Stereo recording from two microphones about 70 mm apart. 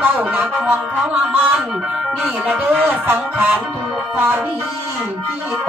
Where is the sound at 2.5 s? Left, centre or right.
Right.